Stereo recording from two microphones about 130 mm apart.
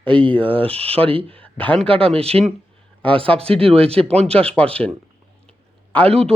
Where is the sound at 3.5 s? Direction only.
45° right (ahead or behind).